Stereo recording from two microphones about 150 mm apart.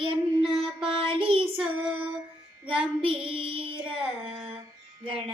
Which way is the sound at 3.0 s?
35° right (ahead or behind).